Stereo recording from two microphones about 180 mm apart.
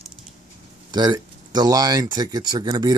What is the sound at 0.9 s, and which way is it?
Speech, 25° right (ahead or behind).